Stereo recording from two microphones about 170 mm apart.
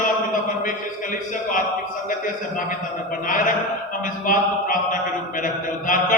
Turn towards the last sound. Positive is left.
turn(degrees=50)  # may be behind; listen again after turning